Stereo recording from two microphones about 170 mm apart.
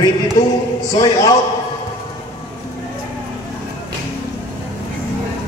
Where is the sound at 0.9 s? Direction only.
20° left (ahead or behind).